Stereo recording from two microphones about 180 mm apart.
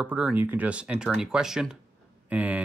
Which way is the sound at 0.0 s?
5° right (ahead or behind).